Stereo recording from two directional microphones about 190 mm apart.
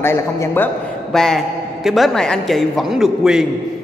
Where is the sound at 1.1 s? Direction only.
Centre (ahead or behind).